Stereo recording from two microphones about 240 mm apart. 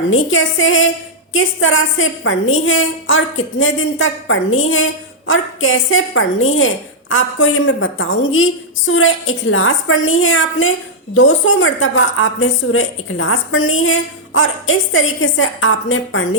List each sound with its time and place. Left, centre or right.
0.1 s a woman's voice: left